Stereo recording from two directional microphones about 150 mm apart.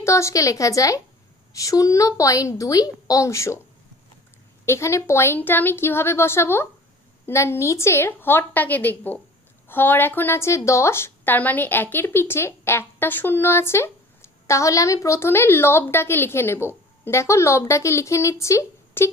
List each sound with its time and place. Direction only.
0.0 s a woman's voice: 20° left (ahead or behind)
4.6 s speech: 20° left (ahead or behind)